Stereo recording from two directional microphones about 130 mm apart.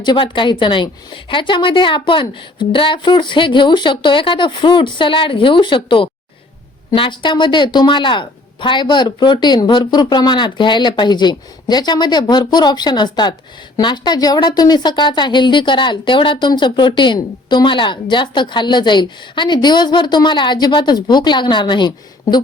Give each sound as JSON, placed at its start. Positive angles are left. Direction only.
{"t": 0.0, "sound": "a woman's voice", "side_deg": 35}